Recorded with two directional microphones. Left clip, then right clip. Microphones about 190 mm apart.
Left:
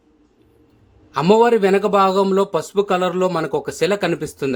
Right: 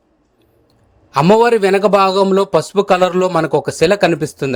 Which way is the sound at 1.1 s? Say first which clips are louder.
Right 3 dB; 30° right (ahead or behind).